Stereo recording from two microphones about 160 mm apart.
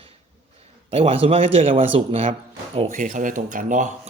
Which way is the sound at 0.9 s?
35° right (ahead or behind).